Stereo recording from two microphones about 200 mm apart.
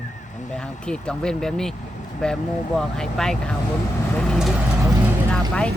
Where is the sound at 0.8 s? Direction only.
5° left (ahead or behind).